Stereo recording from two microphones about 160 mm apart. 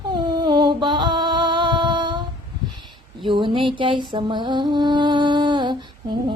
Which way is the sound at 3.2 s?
30° right (ahead or behind).